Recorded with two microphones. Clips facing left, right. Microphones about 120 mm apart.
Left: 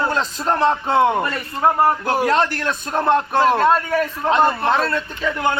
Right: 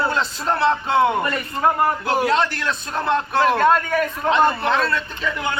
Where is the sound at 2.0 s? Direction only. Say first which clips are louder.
Left 1 dB; 45° left (ahead or behind).